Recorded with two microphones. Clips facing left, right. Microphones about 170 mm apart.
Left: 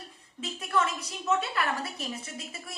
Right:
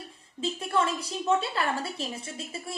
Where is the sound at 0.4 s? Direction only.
30° right (ahead or behind).